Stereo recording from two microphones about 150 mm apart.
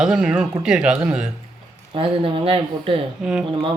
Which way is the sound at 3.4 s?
35° right (ahead or behind).